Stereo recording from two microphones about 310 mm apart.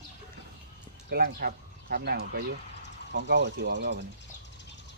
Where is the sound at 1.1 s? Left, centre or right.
Right.